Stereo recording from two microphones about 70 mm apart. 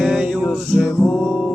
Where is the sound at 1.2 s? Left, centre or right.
Centre.